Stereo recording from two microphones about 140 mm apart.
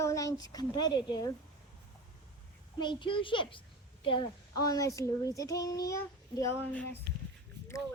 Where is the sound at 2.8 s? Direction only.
35° left (ahead or behind).